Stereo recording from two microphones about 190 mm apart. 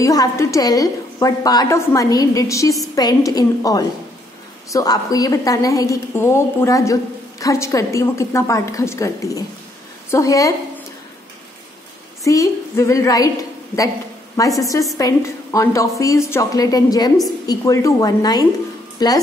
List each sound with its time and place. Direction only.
0.0 s a woman's voice: 15° left (ahead or behind)
12.3 s a woman's voice: 15° left (ahead or behind)
14.6 s a woman's voice: 15° left (ahead or behind)